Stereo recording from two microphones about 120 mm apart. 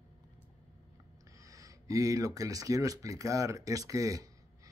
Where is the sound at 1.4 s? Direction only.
30° right (ahead or behind).